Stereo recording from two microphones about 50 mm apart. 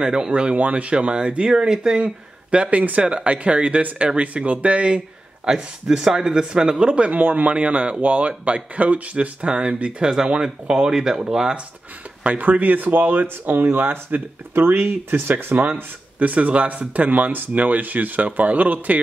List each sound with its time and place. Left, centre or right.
0.0 s speech: centre
7.1 s speech: right; by 11.5 s centre
12.2 s speech: right